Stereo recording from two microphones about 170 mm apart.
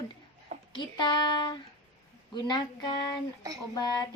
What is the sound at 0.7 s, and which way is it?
Child singing, 25° left (ahead or behind).